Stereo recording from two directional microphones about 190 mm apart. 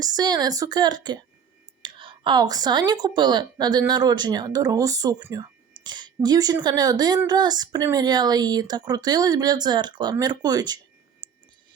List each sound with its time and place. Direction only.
0.0 s speech: 20° right (ahead or behind)